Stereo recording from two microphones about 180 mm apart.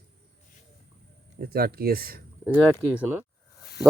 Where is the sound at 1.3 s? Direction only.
60° right (ahead or behind).